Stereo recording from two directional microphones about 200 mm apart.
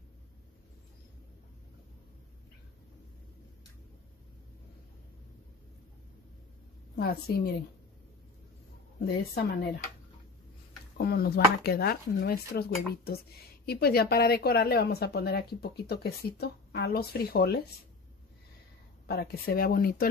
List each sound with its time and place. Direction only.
7.0 s a woman's voice: 50° left (ahead or behind)
9.0 s a woman's voice: 55° left (ahead or behind)
11.0 s a woman's voice: 50° left (ahead or behind)
19.0 s a woman's voice: 50° left (ahead or behind)